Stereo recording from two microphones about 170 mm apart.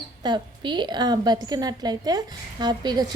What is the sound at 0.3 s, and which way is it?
A woman's voice, 25° right (ahead or behind).